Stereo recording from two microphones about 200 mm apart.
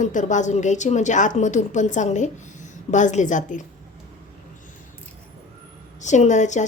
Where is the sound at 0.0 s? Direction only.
40° left (ahead or behind).